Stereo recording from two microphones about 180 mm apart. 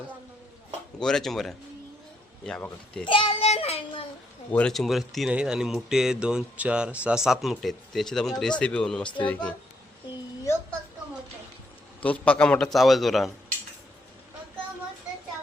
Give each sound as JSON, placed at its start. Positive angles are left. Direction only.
{"t": 0.9, "sound": "speech", "side_deg": 5}
{"t": 3.0, "sound": "child singing", "side_deg": 30}
{"t": 4.5, "sound": "speech", "side_deg": 5}
{"t": 12.0, "sound": "speech", "side_deg": 5}